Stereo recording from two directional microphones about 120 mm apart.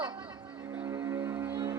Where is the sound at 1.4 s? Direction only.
30° right (ahead or behind).